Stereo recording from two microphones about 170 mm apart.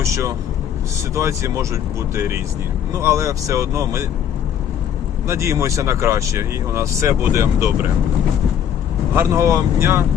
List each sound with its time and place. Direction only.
0.0 s speech: 15° right (ahead or behind)
5.3 s speech: 15° right (ahead or behind)
9.1 s speech: 20° right (ahead or behind)